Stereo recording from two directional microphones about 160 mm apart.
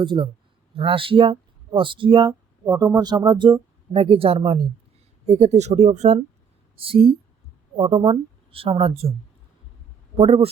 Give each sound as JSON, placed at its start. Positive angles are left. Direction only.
{"t": 0.0, "sound": "speech", "side_deg": -30}
{"t": 6.7, "sound": "speech", "side_deg": -35}
{"t": 10.2, "sound": "speech", "side_deg": -35}